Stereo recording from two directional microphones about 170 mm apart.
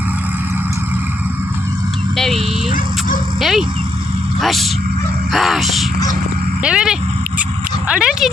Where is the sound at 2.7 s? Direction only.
50° left (ahead or behind).